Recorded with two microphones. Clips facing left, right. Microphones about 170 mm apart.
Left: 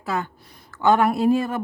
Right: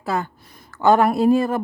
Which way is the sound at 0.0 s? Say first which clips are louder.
Right 2 dB; 35° right (ahead or behind).